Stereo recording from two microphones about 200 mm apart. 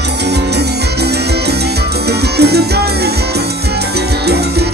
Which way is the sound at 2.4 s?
55° right (ahead or behind).